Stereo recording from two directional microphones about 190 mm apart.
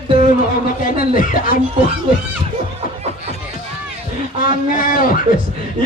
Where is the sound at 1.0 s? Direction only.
45° left (ahead or behind).